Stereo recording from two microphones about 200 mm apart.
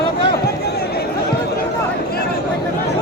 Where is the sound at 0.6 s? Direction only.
50° left (ahead or behind).